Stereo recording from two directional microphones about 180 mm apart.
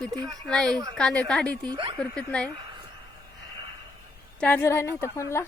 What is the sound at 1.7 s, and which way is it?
Speech, 25° right (ahead or behind).